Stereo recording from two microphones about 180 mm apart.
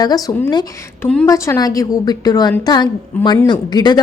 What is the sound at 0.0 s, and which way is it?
A woman's voice, 20° left (ahead or behind).